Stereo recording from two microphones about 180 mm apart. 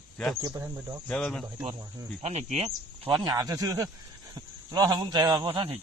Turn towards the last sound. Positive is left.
turn(degrees=-30)  # may be behind; listen again after turning